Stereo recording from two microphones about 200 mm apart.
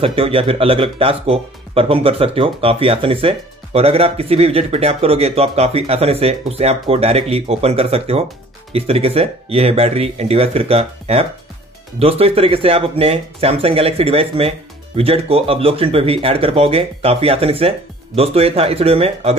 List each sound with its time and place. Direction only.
0.0 s speech: 30° right (ahead or behind)